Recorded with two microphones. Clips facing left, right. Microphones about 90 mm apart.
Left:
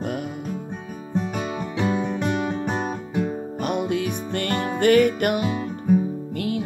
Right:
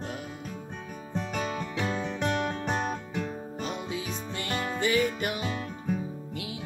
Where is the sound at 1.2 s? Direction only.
15° left (ahead or behind).